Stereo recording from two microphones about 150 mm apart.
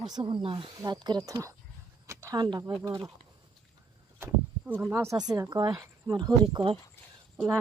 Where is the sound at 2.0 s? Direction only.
20° right (ahead or behind).